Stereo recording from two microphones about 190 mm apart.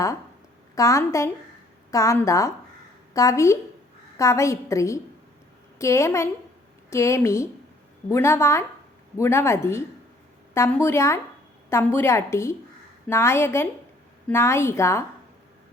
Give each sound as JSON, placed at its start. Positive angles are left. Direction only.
{"t": 0.8, "sound": "a woman's voice", "side_deg": 15}